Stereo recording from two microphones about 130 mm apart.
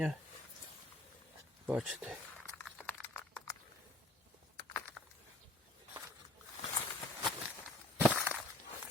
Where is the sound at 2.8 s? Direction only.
15° left (ahead or behind).